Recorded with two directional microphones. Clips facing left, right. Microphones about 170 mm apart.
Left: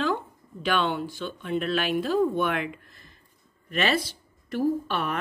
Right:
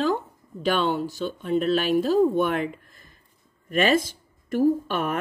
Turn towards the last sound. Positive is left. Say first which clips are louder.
# right 3 dB
turn(degrees=-45)  # may be behind; listen again after turning